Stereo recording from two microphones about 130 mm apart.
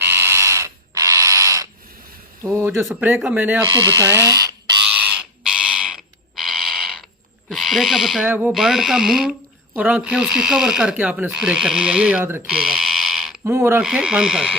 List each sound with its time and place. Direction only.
0.0 s a sound: 20° right (ahead or behind)
2.4 s speech: 20° right (ahead or behind)
5.4 s bird: 5° right (ahead or behind)
6.3 s a sound: centre (ahead or behind)
7.5 s speech: centre (ahead or behind)
8.3 s speech: 15° right (ahead or behind)
8.5 s speech: centre (ahead or behind)
12.5 s a sound: 5° right (ahead or behind)
13.4 s speech: 20° right (ahead or behind)
13.8 s speech: 5° right (ahead or behind)